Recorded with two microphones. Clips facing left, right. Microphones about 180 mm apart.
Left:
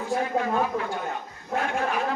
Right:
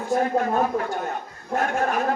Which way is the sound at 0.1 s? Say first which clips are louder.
Right 4 dB; 45° right (ahead or behind).